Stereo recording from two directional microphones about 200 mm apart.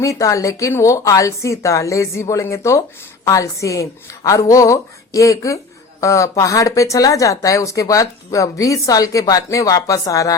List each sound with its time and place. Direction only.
0.0 s speech: 15° left (ahead or behind)